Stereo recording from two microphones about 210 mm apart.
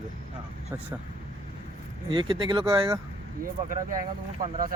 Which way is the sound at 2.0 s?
25° right (ahead or behind).